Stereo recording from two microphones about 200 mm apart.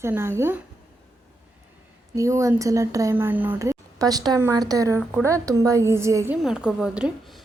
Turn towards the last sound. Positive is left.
turn(degrees=0)  # may be behind; listen again after turning